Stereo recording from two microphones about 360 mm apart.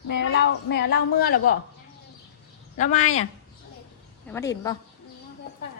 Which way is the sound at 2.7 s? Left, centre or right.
Centre.